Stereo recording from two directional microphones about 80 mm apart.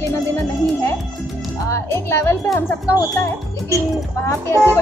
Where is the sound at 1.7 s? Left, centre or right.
Left.